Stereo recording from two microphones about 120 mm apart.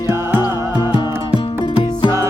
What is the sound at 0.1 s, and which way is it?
Music, 20° right (ahead or behind).